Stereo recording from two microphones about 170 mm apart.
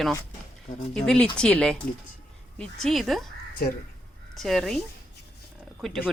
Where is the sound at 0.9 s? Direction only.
5° left (ahead or behind).